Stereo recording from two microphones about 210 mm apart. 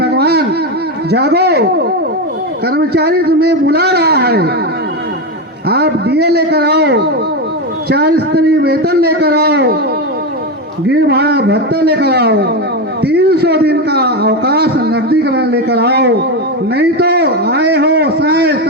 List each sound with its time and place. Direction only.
0.0 s a sound: 50° right (ahead or behind)
1.1 s a man's voice: 50° right (ahead or behind)
2.6 s a man's voice: 50° right (ahead or behind)
5.6 s a man's voice: 50° right (ahead or behind)
10.8 s a man's voice: 50° right (ahead or behind)